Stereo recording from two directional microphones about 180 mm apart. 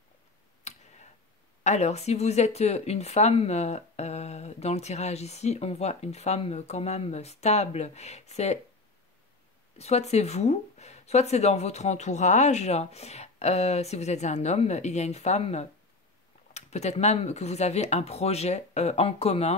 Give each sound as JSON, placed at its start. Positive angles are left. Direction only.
{"t": 0.7, "sound": "tick", "side_deg": 40}
{"t": 1.6, "sound": "speech", "side_deg": 40}
{"t": 9.8, "sound": "speech", "side_deg": 35}